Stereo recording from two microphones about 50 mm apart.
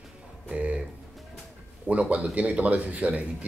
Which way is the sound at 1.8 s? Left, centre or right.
Right.